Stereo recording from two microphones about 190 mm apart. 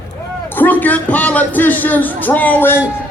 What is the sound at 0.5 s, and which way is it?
Speech, 10° left (ahead or behind).